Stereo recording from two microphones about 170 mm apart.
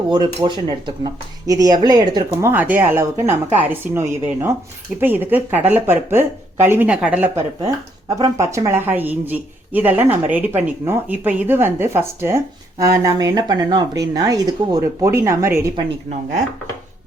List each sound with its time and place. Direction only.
0.1 s speech: 25° right (ahead or behind)
2.5 s speech: 10° right (ahead or behind)
15.7 s speech: 40° right (ahead or behind)